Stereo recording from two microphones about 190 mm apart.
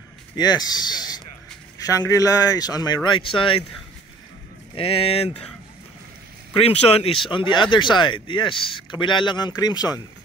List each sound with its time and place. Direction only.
0.4 s speech: 20° left (ahead or behind)
4.7 s speech: 30° left (ahead or behind)
6.6 s speech: 30° left (ahead or behind)